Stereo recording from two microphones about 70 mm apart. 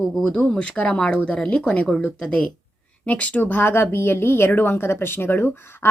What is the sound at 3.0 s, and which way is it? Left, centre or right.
Speech, centre.